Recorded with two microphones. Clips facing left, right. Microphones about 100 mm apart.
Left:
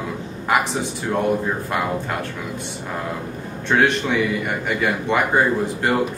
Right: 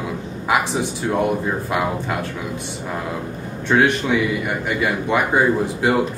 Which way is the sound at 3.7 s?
5° right (ahead or behind).